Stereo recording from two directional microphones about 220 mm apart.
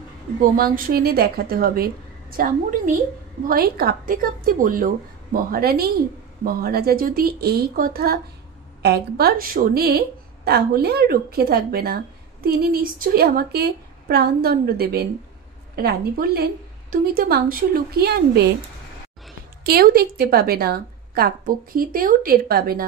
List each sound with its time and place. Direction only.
0.4 s a woman's voice: 40° right (ahead or behind)
19.6 s a woman's voice: 45° right (ahead or behind)